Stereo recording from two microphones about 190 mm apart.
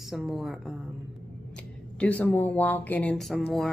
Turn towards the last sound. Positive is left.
turn(degrees=5)  # may be behind; listen again after turning